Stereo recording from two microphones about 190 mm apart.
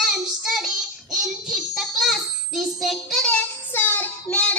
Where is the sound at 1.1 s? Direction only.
Centre (ahead or behind).